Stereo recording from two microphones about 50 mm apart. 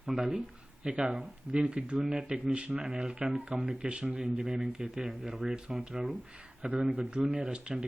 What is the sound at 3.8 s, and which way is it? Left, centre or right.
Speech, right.